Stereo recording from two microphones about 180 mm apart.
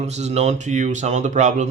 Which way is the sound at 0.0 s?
35° right (ahead or behind).